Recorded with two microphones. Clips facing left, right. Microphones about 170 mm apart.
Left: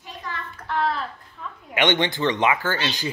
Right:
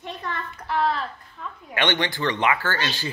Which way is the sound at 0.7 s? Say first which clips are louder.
Right 1 dB; centre (ahead or behind).